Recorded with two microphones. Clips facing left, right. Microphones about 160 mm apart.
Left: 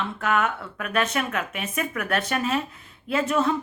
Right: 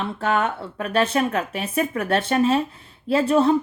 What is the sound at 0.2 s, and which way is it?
Speech, 30° right (ahead or behind).